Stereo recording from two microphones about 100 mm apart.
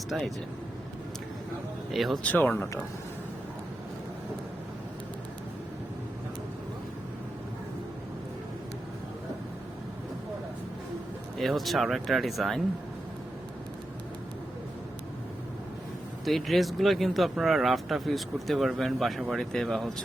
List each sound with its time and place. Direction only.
0.1 s speech: centre (ahead or behind)
1.9 s speech: centre (ahead or behind)
2.2 s speech: 15° left (ahead or behind)
11.3 s speech: centre (ahead or behind)
16.2 s speech: centre (ahead or behind)